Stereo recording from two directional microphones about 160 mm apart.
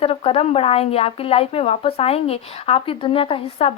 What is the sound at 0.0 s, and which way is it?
Speech, 35° left (ahead or behind).